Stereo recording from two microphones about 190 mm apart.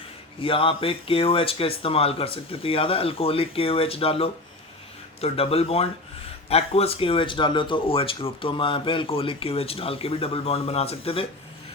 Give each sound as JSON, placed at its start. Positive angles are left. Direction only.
{"t": 0.4, "sound": "speech", "side_deg": 30}